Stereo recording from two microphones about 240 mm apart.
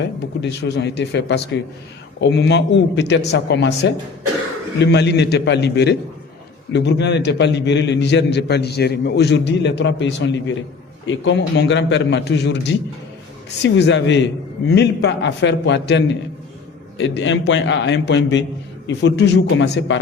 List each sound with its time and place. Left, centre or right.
0.4 s a man's voice: left